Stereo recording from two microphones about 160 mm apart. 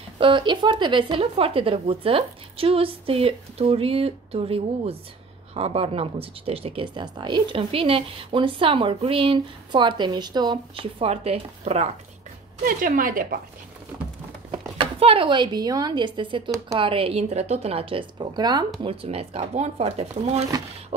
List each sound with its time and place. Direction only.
0.2 s speech: 30° right (ahead or behind)
12.6 s a woman's voice: 60° right (ahead or behind)
14.5 s speech: 35° right (ahead or behind)